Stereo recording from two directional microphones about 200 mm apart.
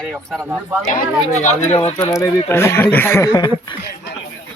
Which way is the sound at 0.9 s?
35° left (ahead or behind).